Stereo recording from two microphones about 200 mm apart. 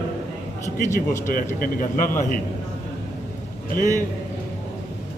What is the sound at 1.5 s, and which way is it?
Speech, 45° left (ahead or behind).